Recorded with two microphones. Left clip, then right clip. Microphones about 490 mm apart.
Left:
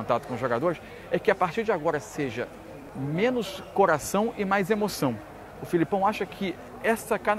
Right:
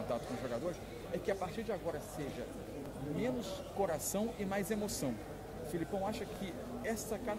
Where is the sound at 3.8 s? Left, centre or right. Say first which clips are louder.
Left 14 dB; left.